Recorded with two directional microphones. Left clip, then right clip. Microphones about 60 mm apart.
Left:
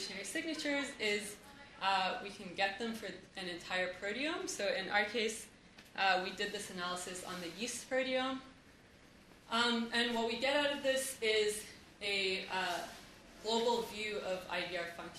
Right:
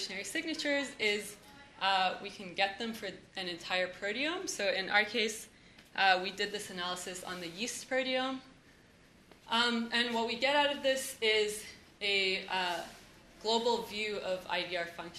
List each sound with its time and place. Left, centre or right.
0.0 s speech: right
9.5 s speech: right